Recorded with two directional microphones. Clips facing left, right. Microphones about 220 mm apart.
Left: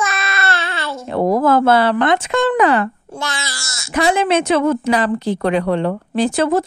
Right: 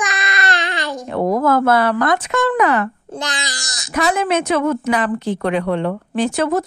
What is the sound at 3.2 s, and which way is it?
Speech, 15° right (ahead or behind).